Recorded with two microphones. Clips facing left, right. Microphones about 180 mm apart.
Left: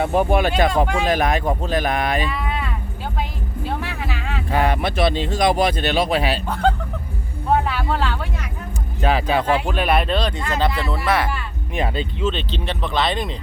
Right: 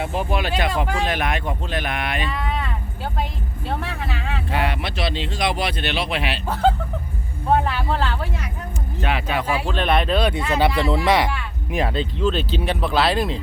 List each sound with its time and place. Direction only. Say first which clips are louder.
0.1 s speech: left 6 dB; 60° left (ahead or behind)
1.0 s speech: left 5 dB; 40° left (ahead or behind)
2.3 s speech: even; 5° left (ahead or behind)
3.7 s speech: right 1 dB; centre (ahead or behind)
4.5 s speech: left 6 dB; 45° left (ahead or behind)
6.5 s speech: right 1 dB; 5° right (ahead or behind)
9.0 s speech: left 5 dB; 35° left (ahead or behind)
9.6 s speech: left 1 dB; 5° left (ahead or behind); by 11.3 s 15° right (ahead or behind)
11.3 s speech: right 1 dB; centre (ahead or behind)